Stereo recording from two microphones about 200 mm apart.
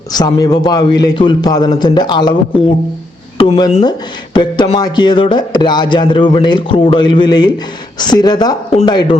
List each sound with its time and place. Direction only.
0.1 s speech: 20° left (ahead or behind)